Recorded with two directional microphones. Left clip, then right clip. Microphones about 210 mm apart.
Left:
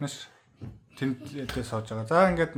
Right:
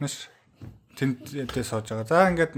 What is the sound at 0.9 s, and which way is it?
Speech, 40° right (ahead or behind).